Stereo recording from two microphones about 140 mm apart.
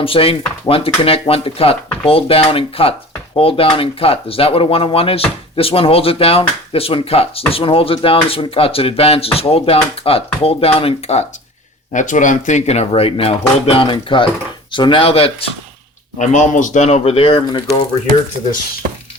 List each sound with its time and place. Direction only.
0.0 s dishes: 40° left (ahead or behind)
1.3 s speech: 45° left (ahead or behind)
11.9 s speech: 65° left (ahead or behind); by 14.3 s 35° left (ahead or behind)
14.7 s dishes: 35° left (ahead or behind)
16.1 s speech: 60° left (ahead or behind); by 17.6 s 40° left (ahead or behind)